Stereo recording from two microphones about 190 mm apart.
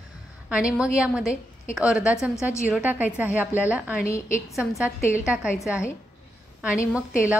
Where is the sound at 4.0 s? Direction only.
15° left (ahead or behind).